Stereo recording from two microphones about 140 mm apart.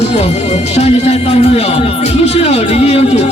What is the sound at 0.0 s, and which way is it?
Speech, 50° left (ahead or behind).